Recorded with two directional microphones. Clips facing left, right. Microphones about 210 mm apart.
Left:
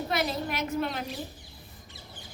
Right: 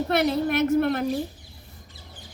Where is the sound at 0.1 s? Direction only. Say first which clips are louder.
Right 8 dB; 60° right (ahead or behind).